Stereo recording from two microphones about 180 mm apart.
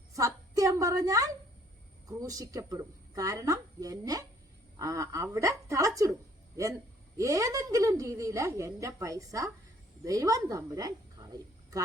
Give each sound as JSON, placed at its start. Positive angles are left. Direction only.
{"t": 0.1, "sound": "a sound", "side_deg": -20}
{"t": 2.0, "sound": "a woman's voice", "side_deg": -20}
{"t": 7.2, "sound": "a woman's voice", "side_deg": -15}